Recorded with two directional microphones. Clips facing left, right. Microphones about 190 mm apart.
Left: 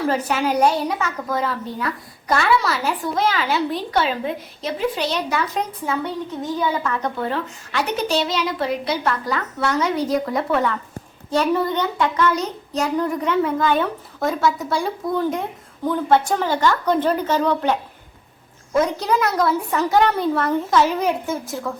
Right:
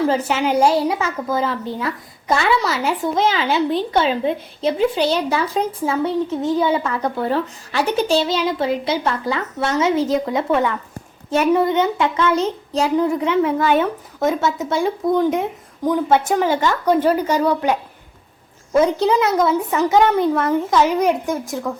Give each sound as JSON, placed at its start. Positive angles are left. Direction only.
{"t": 0.1, "sound": "a woman's voice", "side_deg": -25}
{"t": 18.7, "sound": "a woman's voice", "side_deg": -25}